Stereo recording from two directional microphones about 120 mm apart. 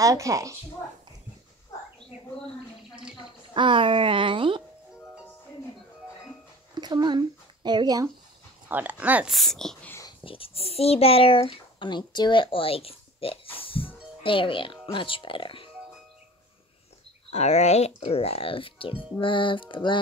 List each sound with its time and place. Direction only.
0.0 s speech: 25° right (ahead or behind)
3.5 s speech: 45° right (ahead or behind)
6.7 s a sound: 35° right (ahead or behind)
8.6 s speech: 15° right (ahead or behind)
9.3 s speech: centre (ahead or behind)
10.2 s a child's voice: 50° left (ahead or behind)
17.3 s a child's voice: 65° left (ahead or behind); by 20.0 s 45° left (ahead or behind)